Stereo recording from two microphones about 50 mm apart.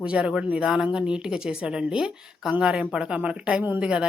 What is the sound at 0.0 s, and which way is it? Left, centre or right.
Speech, right.